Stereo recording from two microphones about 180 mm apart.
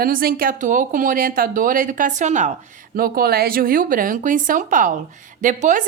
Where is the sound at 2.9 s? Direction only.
55° right (ahead or behind).